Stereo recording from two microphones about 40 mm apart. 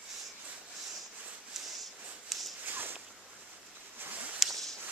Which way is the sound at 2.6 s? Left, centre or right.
Right.